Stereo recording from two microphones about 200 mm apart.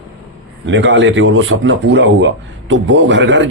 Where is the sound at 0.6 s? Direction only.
65° right (ahead or behind).